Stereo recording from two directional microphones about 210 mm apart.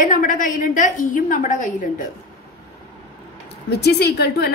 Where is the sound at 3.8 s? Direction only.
50° left (ahead or behind).